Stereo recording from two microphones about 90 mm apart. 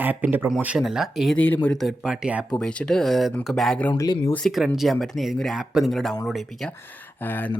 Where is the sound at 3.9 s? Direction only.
45° left (ahead or behind).